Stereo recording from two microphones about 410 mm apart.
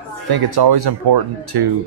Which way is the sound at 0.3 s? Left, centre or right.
Right.